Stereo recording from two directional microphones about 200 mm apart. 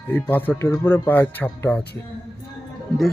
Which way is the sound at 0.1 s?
10° left (ahead or behind).